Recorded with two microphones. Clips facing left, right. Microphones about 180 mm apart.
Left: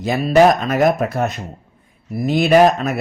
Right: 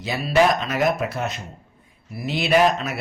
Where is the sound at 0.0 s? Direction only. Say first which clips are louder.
Left 6 dB; 45° left (ahead or behind).